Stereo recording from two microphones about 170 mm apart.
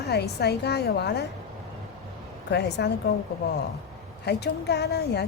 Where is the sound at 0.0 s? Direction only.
75° left (ahead or behind).